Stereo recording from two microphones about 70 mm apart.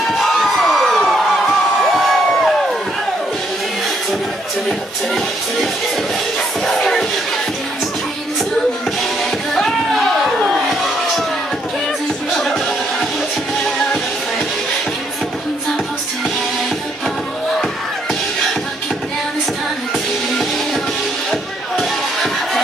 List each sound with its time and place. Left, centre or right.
0.0 s crowd: centre
4.6 s music: centre
9.6 s a sound: centre
21.3 s music: centre